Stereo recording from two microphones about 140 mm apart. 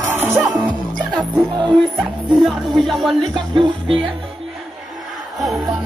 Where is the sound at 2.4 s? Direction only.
Centre (ahead or behind).